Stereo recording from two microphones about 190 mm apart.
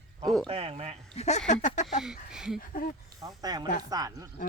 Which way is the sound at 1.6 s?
40° left (ahead or behind).